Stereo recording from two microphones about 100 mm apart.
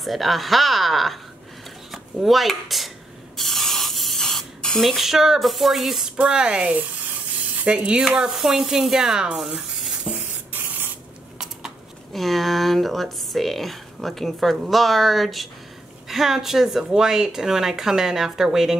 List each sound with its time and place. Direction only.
0.0 s speech: centre (ahead or behind)
3.3 s spray: centre (ahead or behind)
7.6 s speech: 10° right (ahead or behind)
10.5 s spray: 20° right (ahead or behind)
11.3 s speech: 5° right (ahead or behind)